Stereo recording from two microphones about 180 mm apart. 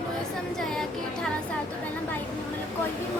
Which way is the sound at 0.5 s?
Centre (ahead or behind).